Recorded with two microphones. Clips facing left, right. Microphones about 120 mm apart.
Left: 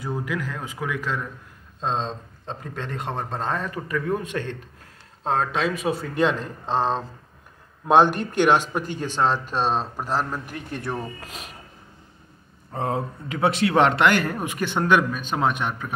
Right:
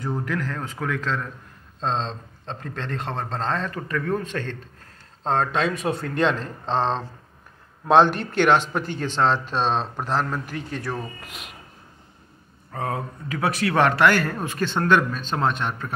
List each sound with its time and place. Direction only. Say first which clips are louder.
0.0 s speech: right 1 dB; 10° left (ahead or behind)
10.8 s speech: left 3 dB; 25° left (ahead or behind)
11.2 s speech: left 2 dB; 35° left (ahead or behind)
12.7 s speech: left 2 dB; 25° left (ahead or behind)